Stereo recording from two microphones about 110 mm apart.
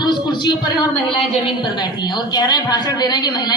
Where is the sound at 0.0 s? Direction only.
45° left (ahead or behind).